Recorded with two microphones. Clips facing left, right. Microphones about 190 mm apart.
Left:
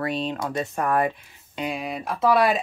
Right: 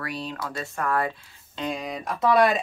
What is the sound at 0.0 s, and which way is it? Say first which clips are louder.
Speech: left 6 dB; 25° left (ahead or behind).